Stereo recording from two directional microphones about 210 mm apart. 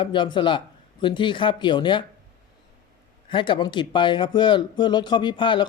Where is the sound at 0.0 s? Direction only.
20° left (ahead or behind).